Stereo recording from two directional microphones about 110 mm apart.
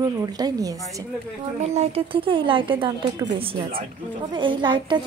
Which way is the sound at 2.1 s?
50° right (ahead or behind).